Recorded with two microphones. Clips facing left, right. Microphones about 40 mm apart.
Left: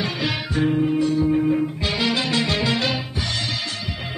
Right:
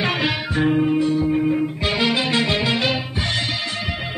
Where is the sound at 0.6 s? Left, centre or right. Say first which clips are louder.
Right 2 dB; right.